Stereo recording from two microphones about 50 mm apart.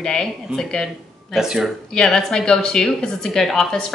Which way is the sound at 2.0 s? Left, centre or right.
Centre.